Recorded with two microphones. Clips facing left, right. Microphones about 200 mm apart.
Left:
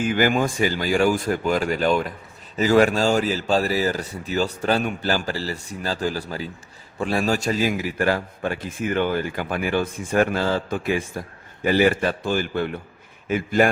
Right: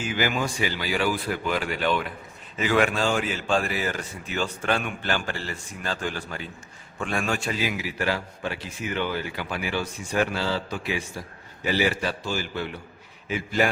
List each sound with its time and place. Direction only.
0.0 s a man's voice: 50° left (ahead or behind)